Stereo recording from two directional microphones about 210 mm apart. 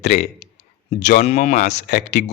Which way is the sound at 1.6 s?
50° left (ahead or behind).